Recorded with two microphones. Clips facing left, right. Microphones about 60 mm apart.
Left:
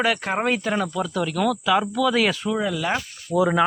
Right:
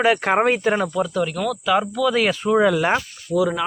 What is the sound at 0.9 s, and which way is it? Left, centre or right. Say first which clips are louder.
Speech: right 3 dB; centre.